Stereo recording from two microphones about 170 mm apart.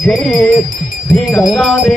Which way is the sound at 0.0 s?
Centre (ahead or behind).